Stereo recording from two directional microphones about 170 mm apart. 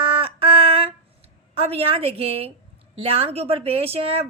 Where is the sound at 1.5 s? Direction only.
35° right (ahead or behind).